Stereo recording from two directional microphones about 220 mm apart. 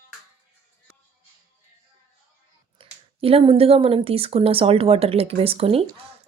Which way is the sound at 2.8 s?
25° right (ahead or behind).